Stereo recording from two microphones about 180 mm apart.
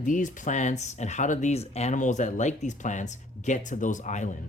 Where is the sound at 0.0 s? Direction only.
45° left (ahead or behind).